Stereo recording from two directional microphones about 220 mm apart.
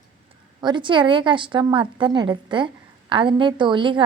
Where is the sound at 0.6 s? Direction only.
20° right (ahead or behind).